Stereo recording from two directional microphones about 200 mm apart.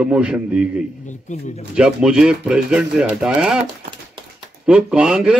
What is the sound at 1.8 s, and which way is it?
A man's voice, 5° right (ahead or behind).